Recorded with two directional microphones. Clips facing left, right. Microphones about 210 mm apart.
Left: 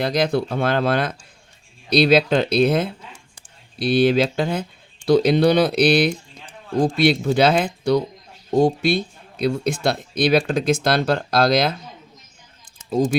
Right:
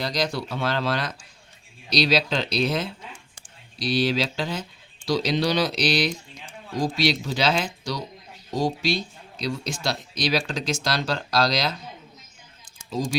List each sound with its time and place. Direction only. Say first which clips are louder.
0.0 s speech: left 7 dB; 55° left (ahead or behind)